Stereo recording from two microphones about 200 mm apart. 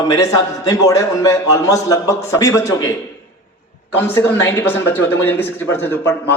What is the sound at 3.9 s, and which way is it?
A man's voice, 10° left (ahead or behind).